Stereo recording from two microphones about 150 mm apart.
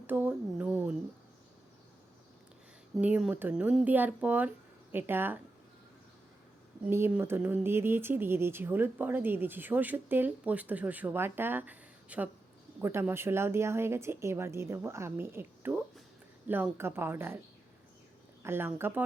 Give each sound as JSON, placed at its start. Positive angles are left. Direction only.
{"t": 0.1, "sound": "a sound", "side_deg": -10}
{"t": 3.0, "sound": "speech", "side_deg": -10}
{"t": 6.8, "sound": "speech", "side_deg": -10}
{"t": 18.4, "sound": "speech", "side_deg": -15}